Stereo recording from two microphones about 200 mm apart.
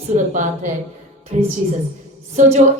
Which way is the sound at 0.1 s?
40° right (ahead or behind).